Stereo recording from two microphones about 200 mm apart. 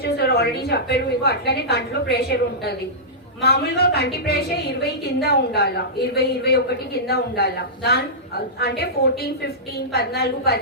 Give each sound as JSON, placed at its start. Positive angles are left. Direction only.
{"t": 0.0, "sound": "a woman's voice", "side_deg": 55}